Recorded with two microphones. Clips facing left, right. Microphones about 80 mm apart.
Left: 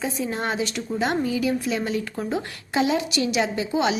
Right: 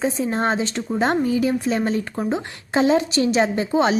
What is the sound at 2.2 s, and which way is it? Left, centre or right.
A woman's voice, right.